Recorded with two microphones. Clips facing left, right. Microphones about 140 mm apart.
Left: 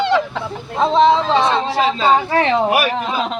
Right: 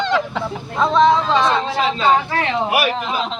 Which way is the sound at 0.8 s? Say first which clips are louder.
Left 1 dB; 25° left (ahead or behind).